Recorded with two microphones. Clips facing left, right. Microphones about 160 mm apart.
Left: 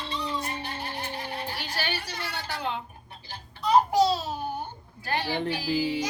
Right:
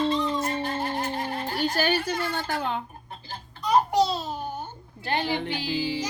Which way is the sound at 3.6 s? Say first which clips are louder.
Left 1 dB; 5° left (ahead or behind).